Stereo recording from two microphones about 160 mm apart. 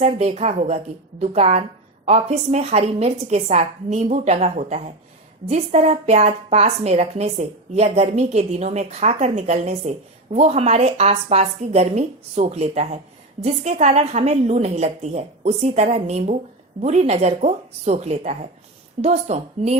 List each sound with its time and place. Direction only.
0.0 s a woman's voice: 40° right (ahead or behind)